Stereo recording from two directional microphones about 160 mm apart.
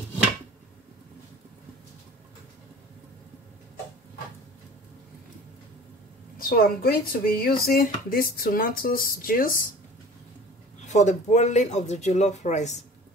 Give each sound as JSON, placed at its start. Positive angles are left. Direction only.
{"t": 6.3, "sound": "speech", "side_deg": 65}
{"t": 10.9, "sound": "speech", "side_deg": 45}